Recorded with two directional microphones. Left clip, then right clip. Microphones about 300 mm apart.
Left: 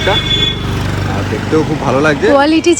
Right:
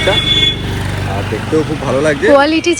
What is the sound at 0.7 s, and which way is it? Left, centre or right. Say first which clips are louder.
Speech: left 1 dB; left.